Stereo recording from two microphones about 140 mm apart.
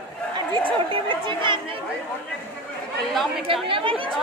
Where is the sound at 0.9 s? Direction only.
35° right (ahead or behind).